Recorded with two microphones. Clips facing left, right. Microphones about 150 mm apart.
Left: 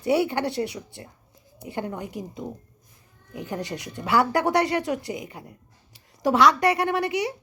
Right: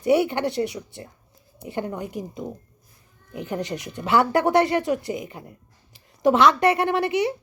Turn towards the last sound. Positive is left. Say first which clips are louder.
# right 3 dB
turn(degrees=-25)  # may be behind; listen again after turning